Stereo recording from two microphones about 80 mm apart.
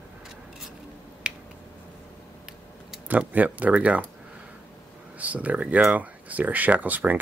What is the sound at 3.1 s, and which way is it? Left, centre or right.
Speech, right.